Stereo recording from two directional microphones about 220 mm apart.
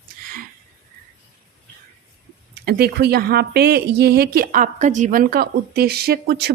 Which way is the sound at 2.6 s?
45° right (ahead or behind).